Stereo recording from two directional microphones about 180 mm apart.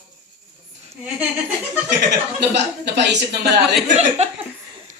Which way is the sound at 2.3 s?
70° right (ahead or behind).